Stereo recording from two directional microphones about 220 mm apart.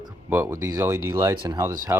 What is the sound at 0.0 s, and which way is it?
Speech, 10° right (ahead or behind).